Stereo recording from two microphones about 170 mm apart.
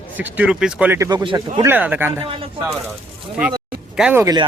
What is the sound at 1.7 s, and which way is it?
Speech, 10° right (ahead or behind).